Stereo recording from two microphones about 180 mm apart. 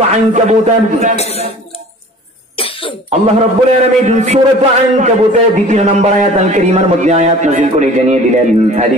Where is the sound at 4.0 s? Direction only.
40° right (ahead or behind).